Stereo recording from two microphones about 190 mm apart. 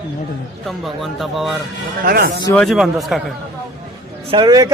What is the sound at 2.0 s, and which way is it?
Speech, 55° right (ahead or behind).